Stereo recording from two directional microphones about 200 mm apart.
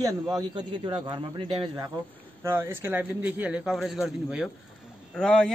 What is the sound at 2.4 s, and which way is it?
A man's voice, 15° right (ahead or behind).